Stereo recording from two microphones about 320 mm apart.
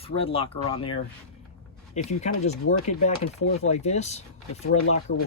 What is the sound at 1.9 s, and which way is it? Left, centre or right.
Speech, left.